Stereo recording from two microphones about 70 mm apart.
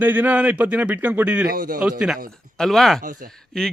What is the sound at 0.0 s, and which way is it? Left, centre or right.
A man's voice, right.